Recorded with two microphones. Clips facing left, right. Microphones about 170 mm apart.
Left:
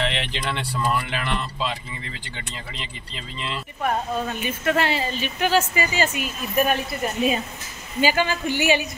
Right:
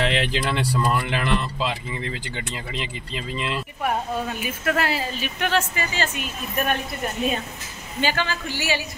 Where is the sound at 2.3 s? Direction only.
5° right (ahead or behind).